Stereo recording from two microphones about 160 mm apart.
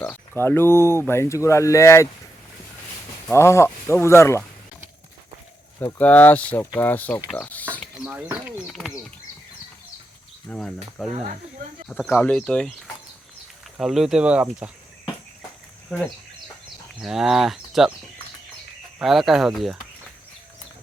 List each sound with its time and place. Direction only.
0.0 s speech: 10° left (ahead or behind)
3.3 s speech: 15° left (ahead or behind)
5.8 s speech: 10° left (ahead or behind)
7.9 s speech: 5° right (ahead or behind)
10.5 s speech: 5° left (ahead or behind)
13.7 s speech: 5° right (ahead or behind)
18.9 s speech: centre (ahead or behind)